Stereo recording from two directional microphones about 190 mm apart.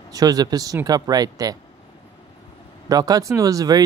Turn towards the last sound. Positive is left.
turn(degrees=-20)  # may be behind; listen again after turning